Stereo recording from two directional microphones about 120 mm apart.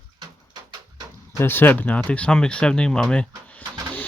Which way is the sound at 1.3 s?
20° left (ahead or behind).